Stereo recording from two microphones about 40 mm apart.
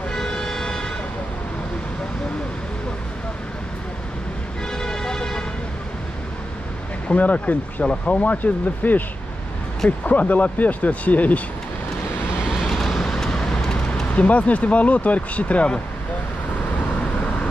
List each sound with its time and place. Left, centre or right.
0.1 s vehicle: centre
4.7 s vehicle: centre
7.1 s speech: left
7.8 s speech: left
8.8 s speech: left
12.6 s vehicle: centre
14.1 s speech: left